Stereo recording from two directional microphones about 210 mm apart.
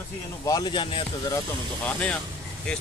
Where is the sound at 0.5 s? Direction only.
20° left (ahead or behind).